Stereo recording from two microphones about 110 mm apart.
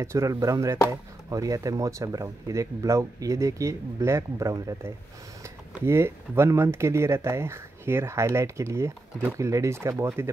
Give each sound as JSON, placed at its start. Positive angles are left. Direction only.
{"t": 0.0, "sound": "speech", "side_deg": -25}